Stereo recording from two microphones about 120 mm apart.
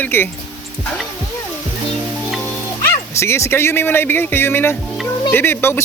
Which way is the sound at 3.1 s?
25° left (ahead or behind).